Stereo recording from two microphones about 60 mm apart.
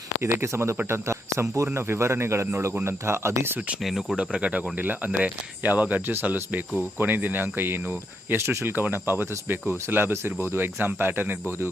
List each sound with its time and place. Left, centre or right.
0.2 s speech: right
3.8 s speech: centre
4.2 s speech: centre; by 11.3 s right